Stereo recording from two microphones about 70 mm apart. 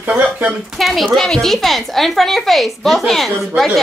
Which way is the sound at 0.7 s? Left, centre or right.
Centre.